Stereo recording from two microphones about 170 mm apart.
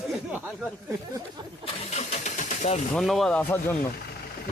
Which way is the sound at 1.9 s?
40° left (ahead or behind).